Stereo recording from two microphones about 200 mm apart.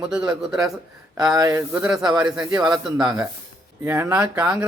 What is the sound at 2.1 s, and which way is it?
Speech, 20° right (ahead or behind).